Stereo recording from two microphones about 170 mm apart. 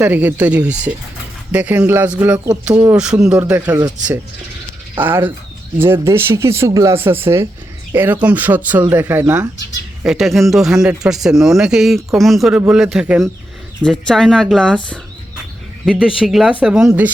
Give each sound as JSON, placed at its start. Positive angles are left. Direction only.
{"t": 0.0, "sound": "speech", "side_deg": -10}
{"t": 4.9, "sound": "speech", "side_deg": -10}
{"t": 15.9, "sound": "speech", "side_deg": 0}